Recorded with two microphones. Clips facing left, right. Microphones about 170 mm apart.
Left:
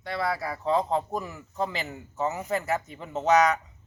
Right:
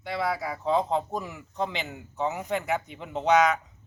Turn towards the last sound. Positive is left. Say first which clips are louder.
# even
turn(degrees=0)  # may be behind; listen again after turning